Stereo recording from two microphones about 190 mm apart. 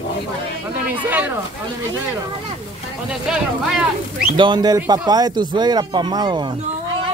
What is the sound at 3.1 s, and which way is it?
Speech, centre (ahead or behind).